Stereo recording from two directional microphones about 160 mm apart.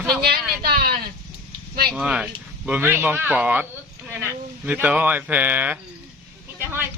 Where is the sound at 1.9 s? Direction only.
5° right (ahead or behind).